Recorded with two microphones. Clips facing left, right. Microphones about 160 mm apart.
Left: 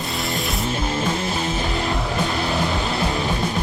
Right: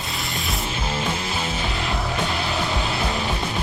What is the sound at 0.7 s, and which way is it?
Music, 40° left (ahead or behind).